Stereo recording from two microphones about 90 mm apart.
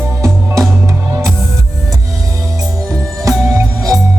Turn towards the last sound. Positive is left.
turn(degrees=-40)  # may be behind; listen again after turning